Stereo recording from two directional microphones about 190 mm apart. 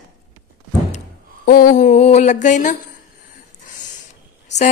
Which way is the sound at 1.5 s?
50° left (ahead or behind).